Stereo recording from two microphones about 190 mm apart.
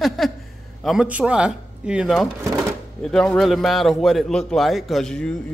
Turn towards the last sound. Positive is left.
turn(degrees=5)  # may be behind; listen again after turning